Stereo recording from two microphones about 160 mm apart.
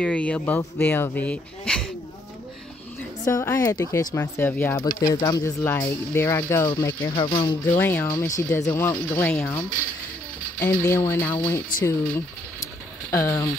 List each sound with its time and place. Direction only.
0.0 s speech: 10° left (ahead or behind)
3.3 s speech: 20° left (ahead or behind)
7.2 s speech: 35° left (ahead or behind)
7.7 s speech: 15° left (ahead or behind)
13.1 s speech: 20° left (ahead or behind)